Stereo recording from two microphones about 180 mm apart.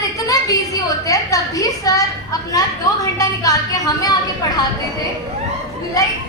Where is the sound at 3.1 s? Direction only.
20° left (ahead or behind).